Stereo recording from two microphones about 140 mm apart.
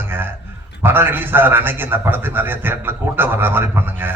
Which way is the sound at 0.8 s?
15° right (ahead or behind).